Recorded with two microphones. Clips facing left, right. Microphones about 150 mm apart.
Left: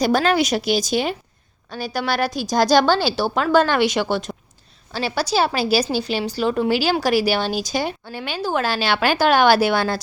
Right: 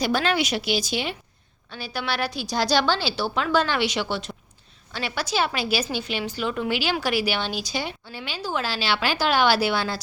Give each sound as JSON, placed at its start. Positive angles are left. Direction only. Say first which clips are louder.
{"t": 0.0, "sound": "a woman's voice", "louder": "left 5 dB", "side_deg": 45}
{"t": 4.9, "sound": "a woman's voice", "louder": "left 6 dB", "side_deg": 35}